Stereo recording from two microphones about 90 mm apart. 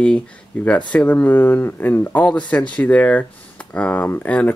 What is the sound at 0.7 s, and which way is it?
Speech, 15° left (ahead or behind).